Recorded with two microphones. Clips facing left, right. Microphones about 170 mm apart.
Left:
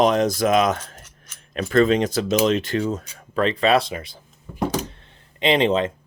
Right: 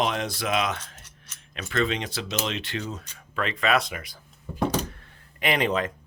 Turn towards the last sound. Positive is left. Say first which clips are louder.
# left 6 dB
turn(degrees=25)  # may be behind; listen again after turning